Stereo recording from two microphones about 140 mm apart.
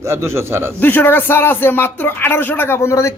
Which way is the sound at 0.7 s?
15° left (ahead or behind).